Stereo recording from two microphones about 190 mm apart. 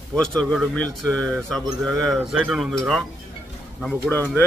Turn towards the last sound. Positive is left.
turn(degrees=10)  # may be behind; listen again after turning